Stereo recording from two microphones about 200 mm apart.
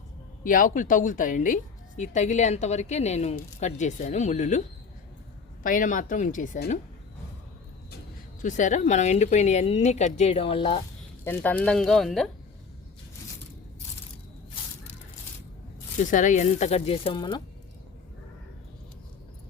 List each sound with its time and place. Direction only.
0.4 s speech: 40° left (ahead or behind)
5.6 s speech: 40° left (ahead or behind)
8.4 s speech: 40° left (ahead or behind)
11.2 s speech: 10° left (ahead or behind)
16.0 s speech: 40° left (ahead or behind); by 17.4 s 25° left (ahead or behind)